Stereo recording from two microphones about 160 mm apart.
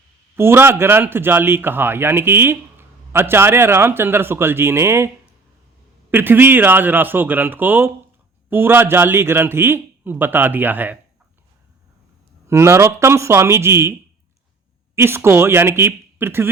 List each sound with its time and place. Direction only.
0.3 s a man's voice: 15° right (ahead or behind)
12.5 s a man's voice: 15° right (ahead or behind)
14.9 s a man's voice: 15° right (ahead or behind)